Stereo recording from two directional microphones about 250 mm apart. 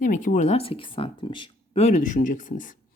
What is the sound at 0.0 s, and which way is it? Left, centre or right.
Speech, left.